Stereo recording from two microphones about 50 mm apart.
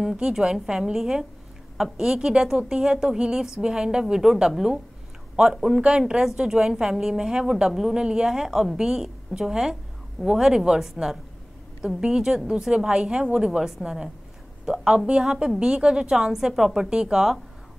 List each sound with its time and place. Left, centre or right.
0.2 s a woman's voice: centre
5.8 s a woman's voice: centre
16.9 s a woman's voice: centre